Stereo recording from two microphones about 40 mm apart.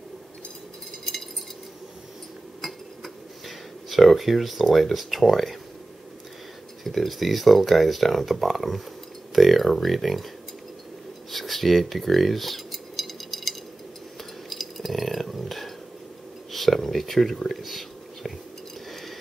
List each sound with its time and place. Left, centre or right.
2.6 s dishes: centre
6.8 s speech: centre
11.3 s cutlery: centre
16.5 s a sound: centre
17.5 s whispering: centre
18.9 s stir: centre